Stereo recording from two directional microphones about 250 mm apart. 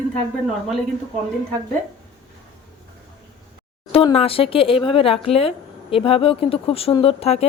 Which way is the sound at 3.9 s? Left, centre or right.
Left.